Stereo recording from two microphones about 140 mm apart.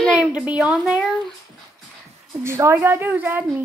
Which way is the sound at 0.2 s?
10° right (ahead or behind).